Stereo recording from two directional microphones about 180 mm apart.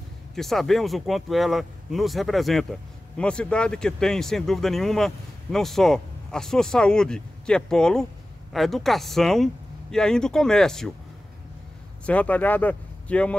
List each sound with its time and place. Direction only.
0.4 s speech: centre (ahead or behind)
12.1 s speech: 10° left (ahead or behind)